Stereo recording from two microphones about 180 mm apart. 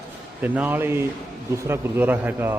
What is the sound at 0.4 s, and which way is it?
A man's voice, 10° right (ahead or behind).